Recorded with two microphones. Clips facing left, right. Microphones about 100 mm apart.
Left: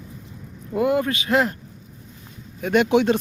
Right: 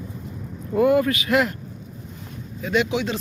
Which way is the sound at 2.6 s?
55° left (ahead or behind).